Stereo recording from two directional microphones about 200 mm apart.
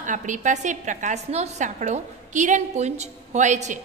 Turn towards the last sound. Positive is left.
turn(degrees=-35)  # may be behind; listen again after turning